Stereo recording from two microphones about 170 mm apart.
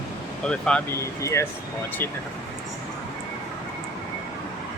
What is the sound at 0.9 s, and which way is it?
Speech, 15° left (ahead or behind).